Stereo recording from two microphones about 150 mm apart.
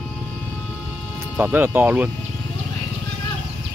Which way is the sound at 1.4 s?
10° right (ahead or behind).